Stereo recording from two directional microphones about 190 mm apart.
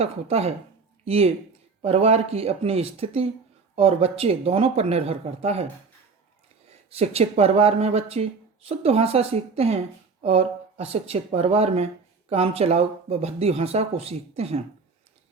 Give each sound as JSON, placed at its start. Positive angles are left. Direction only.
{"t": 0.0, "sound": "speech", "side_deg": -35}
{"t": 6.9, "sound": "speech", "side_deg": -35}